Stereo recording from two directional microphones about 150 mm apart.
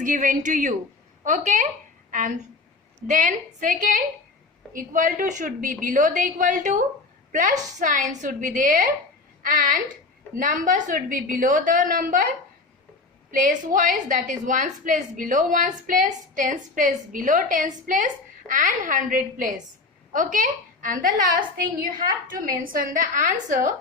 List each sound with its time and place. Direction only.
0.0 s a woman's voice: 60° right (ahead or behind)
13.3 s a woman's voice: 65° right (ahead or behind)